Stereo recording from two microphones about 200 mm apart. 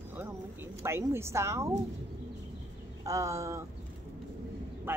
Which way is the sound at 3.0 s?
15° right (ahead or behind).